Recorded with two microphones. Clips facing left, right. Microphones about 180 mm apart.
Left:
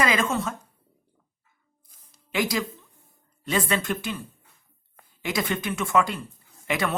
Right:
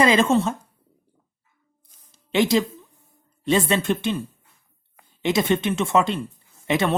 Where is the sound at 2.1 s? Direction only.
25° right (ahead or behind).